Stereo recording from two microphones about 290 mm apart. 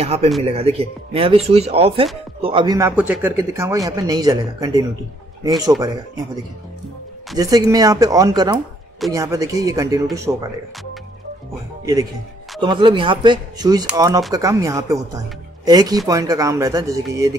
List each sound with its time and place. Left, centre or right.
0.0 s a man's voice: right
7.3 s a man's voice: centre
11.8 s a man's voice: centre